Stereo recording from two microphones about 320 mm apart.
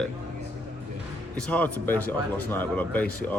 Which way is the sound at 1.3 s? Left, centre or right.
Centre.